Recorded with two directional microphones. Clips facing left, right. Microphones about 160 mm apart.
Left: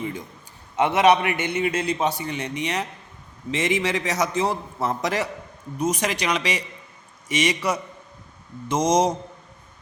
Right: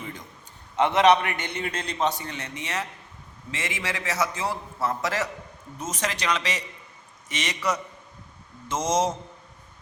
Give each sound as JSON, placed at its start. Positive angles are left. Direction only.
{"t": 0.8, "sound": "a man's voice", "side_deg": 10}